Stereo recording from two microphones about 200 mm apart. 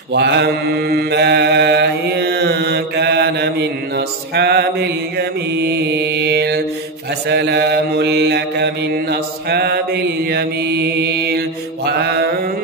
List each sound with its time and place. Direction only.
0.1 s mantra: 60° right (ahead or behind)